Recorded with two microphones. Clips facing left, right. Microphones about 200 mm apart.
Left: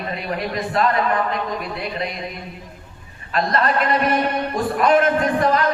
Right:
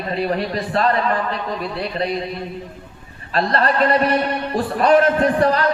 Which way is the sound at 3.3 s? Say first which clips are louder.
Right 1 dB; 30° right (ahead or behind).